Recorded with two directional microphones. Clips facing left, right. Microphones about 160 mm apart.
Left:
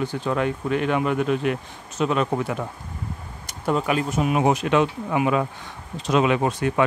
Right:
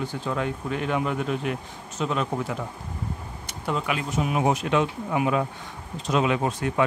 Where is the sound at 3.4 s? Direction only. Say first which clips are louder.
Left 5 dB; 45° left (ahead or behind).